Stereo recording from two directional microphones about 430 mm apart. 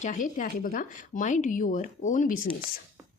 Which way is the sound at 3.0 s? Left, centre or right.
Centre.